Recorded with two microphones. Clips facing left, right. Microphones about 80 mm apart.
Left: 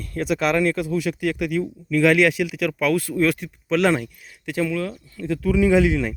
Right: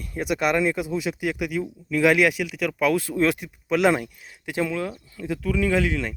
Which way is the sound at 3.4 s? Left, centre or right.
Centre.